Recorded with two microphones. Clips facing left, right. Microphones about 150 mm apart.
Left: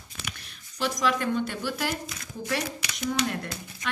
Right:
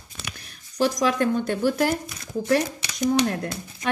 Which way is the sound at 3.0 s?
40° right (ahead or behind).